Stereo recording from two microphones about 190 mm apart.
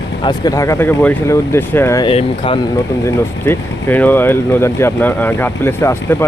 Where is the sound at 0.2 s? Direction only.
20° left (ahead or behind).